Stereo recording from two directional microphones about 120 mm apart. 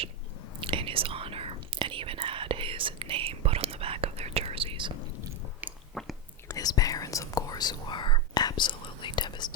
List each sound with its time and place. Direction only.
0.6 s whispering: 45° right (ahead or behind)
5.9 s chewing: centre (ahead or behind)
6.5 s whispering: 30° left (ahead or behind)